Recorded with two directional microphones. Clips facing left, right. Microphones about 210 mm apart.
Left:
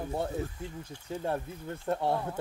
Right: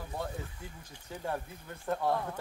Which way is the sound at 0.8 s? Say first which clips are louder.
Left 4 dB; 25° left (ahead or behind).